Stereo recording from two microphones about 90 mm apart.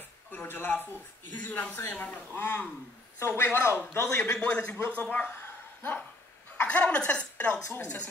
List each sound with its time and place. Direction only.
0.3 s speech: 25° left (ahead or behind)
4.3 s speech: 10° left (ahead or behind)
5.1 s a sound: 20° left (ahead or behind)
6.6 s speech: 15° left (ahead or behind)